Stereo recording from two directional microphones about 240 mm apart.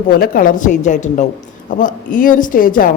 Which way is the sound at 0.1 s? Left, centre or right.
Left.